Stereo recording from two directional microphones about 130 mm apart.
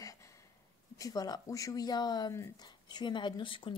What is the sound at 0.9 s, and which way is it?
Speech, 25° left (ahead or behind).